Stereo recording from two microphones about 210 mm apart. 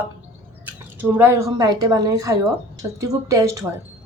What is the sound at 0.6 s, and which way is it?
Speech, 10° right (ahead or behind).